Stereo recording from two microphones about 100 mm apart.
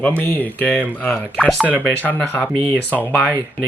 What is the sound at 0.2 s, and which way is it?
Speech, 15° left (ahead or behind).